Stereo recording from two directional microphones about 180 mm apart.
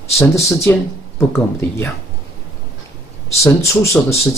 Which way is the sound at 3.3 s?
15° left (ahead or behind).